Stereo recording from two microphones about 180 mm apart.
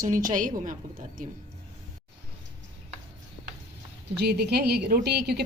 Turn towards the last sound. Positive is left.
turn(degrees=-65)  # may be behind; listen again after turning